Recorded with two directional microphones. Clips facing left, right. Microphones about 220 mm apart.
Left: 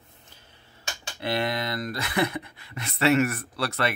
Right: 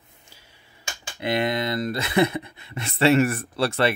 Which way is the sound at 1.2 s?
20° right (ahead or behind).